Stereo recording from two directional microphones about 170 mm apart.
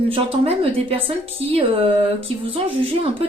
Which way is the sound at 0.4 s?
35° right (ahead or behind).